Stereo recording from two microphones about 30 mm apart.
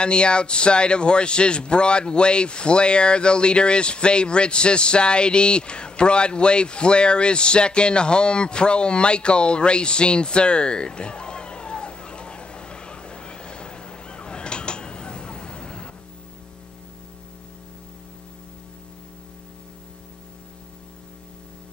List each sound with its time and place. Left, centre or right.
0.0 s a man's voice: left